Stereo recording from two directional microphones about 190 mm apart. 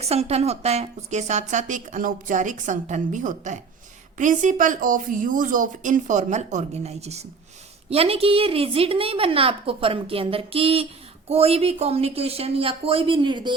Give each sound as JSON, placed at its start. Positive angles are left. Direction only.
{"t": 0.0, "sound": "a woman's voice", "side_deg": -35}